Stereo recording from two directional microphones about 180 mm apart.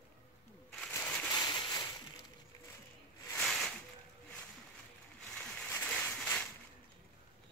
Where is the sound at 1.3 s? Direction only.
20° left (ahead or behind).